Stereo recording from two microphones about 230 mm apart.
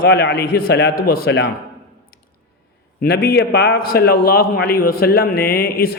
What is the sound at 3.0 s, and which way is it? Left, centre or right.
A man's voice, left.